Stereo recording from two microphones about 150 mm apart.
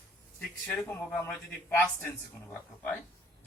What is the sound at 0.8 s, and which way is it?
Speech, 15° left (ahead or behind).